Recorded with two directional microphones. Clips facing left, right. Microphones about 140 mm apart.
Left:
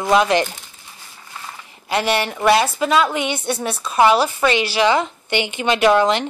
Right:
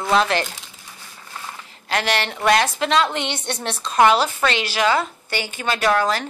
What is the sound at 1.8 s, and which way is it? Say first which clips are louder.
A woman's voice: left 3 dB; 10° left (ahead or behind).